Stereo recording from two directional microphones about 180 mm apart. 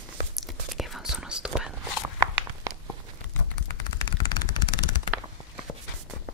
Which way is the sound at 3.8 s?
20° left (ahead or behind).